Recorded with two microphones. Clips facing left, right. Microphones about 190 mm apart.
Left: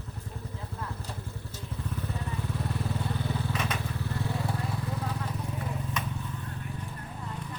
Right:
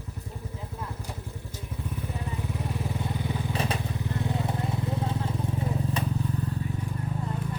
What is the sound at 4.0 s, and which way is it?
Vehicle, 20° right (ahead or behind).